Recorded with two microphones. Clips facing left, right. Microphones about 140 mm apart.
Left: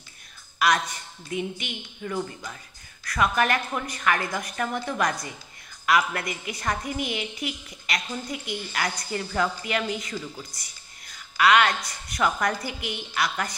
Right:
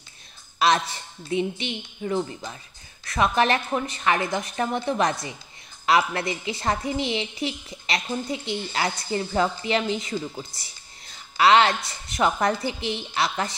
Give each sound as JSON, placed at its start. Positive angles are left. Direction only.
{"t": 0.6, "sound": "speech", "side_deg": -25}